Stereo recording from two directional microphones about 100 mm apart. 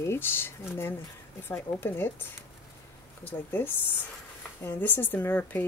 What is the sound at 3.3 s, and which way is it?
Speech, 20° left (ahead or behind).